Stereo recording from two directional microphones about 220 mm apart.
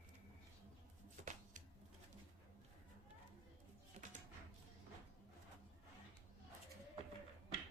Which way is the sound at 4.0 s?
30° right (ahead or behind).